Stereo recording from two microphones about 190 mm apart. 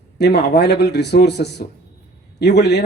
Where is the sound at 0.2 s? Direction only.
60° left (ahead or behind).